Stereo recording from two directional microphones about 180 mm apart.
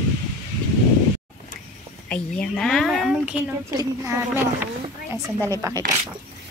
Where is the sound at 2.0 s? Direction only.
5° left (ahead or behind).